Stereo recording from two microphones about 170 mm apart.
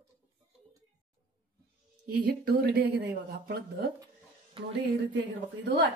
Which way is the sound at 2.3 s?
65° right (ahead or behind).